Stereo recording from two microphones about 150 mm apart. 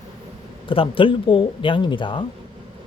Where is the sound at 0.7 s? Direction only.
35° left (ahead or behind).